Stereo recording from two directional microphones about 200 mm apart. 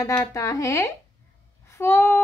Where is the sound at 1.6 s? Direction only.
15° left (ahead or behind).